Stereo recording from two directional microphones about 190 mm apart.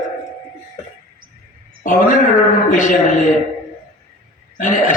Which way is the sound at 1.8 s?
45° left (ahead or behind).